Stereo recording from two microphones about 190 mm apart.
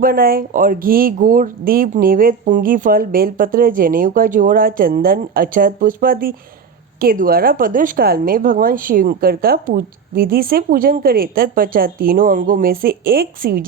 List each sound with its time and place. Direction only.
0.0 s a woman's voice: 50° right (ahead or behind)